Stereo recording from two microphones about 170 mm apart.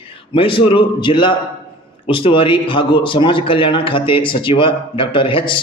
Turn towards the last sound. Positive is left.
turn(degrees=30)  # may be behind; listen again after turning